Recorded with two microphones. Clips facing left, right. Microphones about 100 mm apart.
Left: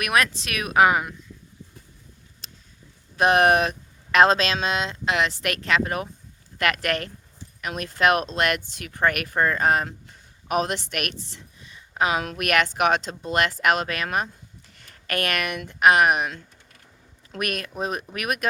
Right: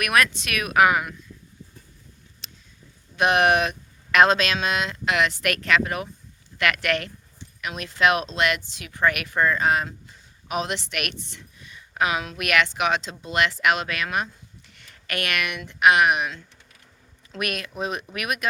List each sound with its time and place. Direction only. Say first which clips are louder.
0.0 s speech: right 1 dB; 25° left (ahead or behind)
2.4 s a sound: even; 40° left (ahead or behind)
3.2 s a woman's voice: left 1 dB; 35° left (ahead or behind)
12.2 s speech: left 1 dB; 45° left (ahead or behind)